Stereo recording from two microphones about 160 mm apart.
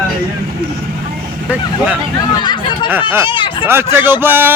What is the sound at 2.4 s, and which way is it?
Speech, 25° left (ahead or behind).